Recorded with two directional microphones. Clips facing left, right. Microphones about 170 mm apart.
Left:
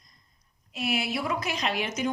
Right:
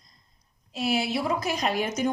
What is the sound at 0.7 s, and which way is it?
A woman's voice, 30° right (ahead or behind).